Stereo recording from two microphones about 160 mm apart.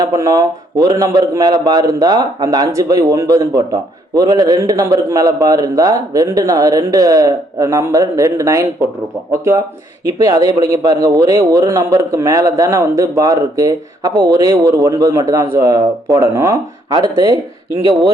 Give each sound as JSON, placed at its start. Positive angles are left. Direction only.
{"t": 0.0, "sound": "a man's voice", "side_deg": -20}